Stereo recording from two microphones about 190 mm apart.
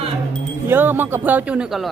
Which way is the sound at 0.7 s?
10° right (ahead or behind).